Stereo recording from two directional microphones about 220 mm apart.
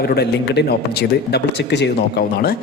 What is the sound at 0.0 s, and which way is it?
Speech, 45° left (ahead or behind).